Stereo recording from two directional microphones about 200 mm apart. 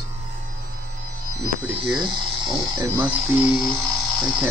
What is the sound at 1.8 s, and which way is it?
Speech, 25° right (ahead or behind).